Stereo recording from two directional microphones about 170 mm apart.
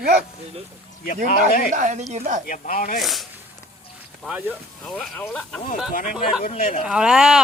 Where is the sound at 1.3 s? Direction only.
55° left (ahead or behind).